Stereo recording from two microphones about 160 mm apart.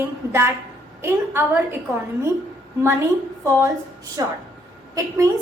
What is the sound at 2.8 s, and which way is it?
Speech, 15° right (ahead or behind).